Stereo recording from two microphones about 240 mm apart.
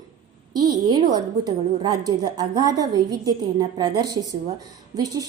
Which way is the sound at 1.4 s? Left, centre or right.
Centre.